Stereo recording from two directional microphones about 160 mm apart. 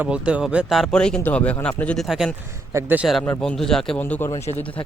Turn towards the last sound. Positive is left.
turn(degrees=15)  # may be behind; listen again after turning